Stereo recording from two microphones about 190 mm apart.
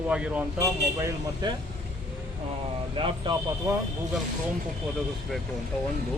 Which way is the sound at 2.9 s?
25° right (ahead or behind).